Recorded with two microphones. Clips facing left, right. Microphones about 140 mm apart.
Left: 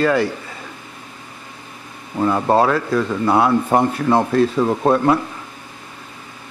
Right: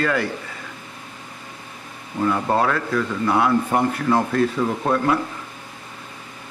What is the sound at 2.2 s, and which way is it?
Speech, 30° left (ahead or behind).